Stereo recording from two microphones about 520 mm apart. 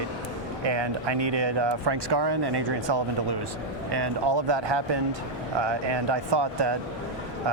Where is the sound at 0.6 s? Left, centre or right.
Right.